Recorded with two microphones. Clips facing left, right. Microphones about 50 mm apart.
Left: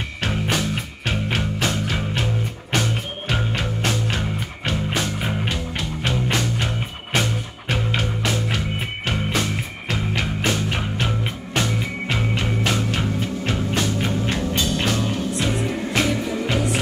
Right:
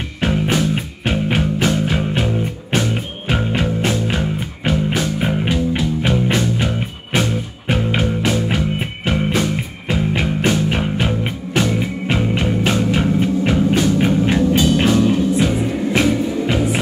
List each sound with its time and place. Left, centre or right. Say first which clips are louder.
0.3 s music: right 6 dB; centre
4.9 s music: right 5 dB; centre
12.9 s music: right 8 dB; right